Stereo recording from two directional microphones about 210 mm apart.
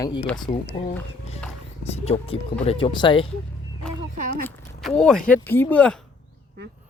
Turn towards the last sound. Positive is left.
turn(degrees=10)  # may be behind; listen again after turning